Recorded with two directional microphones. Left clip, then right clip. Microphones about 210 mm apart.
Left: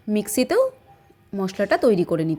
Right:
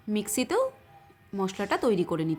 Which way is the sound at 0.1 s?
10° left (ahead or behind).